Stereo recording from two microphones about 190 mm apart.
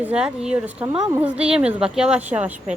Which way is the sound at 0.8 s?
25° right (ahead or behind).